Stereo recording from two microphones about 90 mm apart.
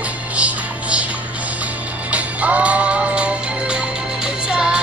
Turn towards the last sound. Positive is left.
turn(degrees=-10)  # may be behind; listen again after turning